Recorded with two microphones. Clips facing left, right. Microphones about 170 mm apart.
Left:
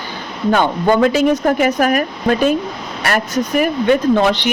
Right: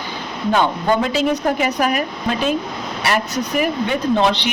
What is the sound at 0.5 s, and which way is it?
Speech, 55° left (ahead or behind).